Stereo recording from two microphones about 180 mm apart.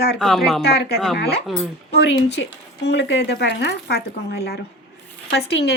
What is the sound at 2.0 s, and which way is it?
Speech, 70° left (ahead or behind).